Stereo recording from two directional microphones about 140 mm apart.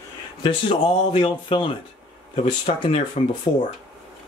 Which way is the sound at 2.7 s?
50° left (ahead or behind).